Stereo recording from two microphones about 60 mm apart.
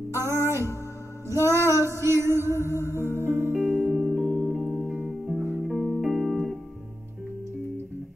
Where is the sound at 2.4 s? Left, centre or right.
Left.